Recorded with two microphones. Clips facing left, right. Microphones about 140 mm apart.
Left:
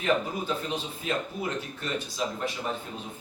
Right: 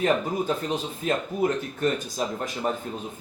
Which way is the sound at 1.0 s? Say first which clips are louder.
Right 8 dB; 45° right (ahead or behind).